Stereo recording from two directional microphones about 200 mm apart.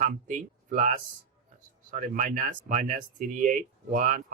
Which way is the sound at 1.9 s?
40° right (ahead or behind).